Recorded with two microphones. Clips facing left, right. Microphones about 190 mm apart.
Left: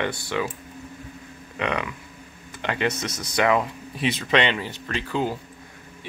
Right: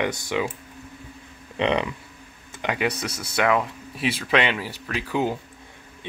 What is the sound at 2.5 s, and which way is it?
Speech, 15° right (ahead or behind).